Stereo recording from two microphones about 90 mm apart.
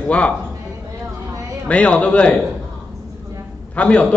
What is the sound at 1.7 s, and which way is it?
Speech, 15° left (ahead or behind).